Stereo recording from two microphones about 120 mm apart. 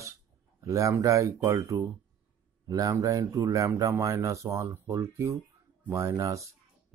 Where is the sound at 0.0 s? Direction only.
25° right (ahead or behind).